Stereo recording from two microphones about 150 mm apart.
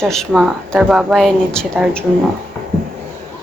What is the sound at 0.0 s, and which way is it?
Speech, 5° left (ahead or behind).